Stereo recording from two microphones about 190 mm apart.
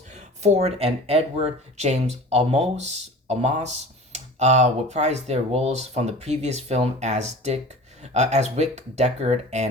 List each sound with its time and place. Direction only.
0.1 s speech: 35° right (ahead or behind)